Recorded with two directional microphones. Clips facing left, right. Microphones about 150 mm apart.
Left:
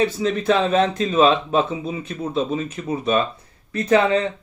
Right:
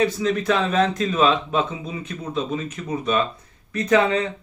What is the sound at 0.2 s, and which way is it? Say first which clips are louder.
Speech: left 2 dB; 30° left (ahead or behind).